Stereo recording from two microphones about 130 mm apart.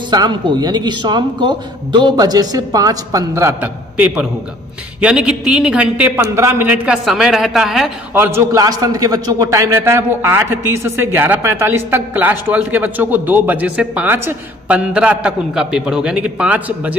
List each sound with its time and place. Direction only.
0.1 s a man's voice: 35° right (ahead or behind)
3.9 s a man's voice: 10° right (ahead or behind)
7.1 s a woman's voice: centre (ahead or behind)
8.1 s a man's voice: 20° right (ahead or behind)